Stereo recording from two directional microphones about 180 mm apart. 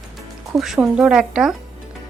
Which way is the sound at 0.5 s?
Centre (ahead or behind).